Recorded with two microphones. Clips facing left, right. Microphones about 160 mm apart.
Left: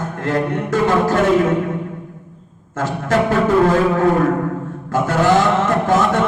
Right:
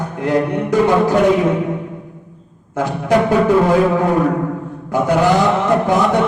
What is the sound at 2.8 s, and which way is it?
Speech, 15° right (ahead or behind).